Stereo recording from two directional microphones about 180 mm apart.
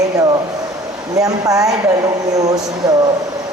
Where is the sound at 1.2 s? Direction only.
20° right (ahead or behind).